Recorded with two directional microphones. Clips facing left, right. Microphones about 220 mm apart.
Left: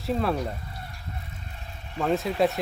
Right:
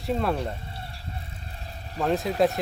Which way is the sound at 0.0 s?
Centre (ahead or behind).